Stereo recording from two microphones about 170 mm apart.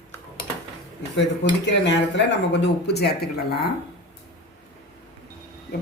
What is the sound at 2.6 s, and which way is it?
Speech, 75° left (ahead or behind).